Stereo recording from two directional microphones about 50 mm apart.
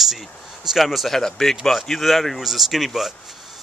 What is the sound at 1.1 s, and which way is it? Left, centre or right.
Speech, centre.